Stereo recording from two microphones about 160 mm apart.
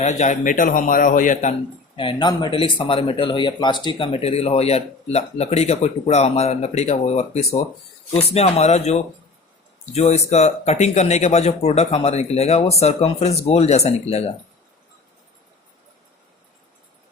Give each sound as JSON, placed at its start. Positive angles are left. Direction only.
{"t": 0.0, "sound": "speech", "side_deg": 45}
{"t": 2.0, "sound": "speech", "side_deg": 30}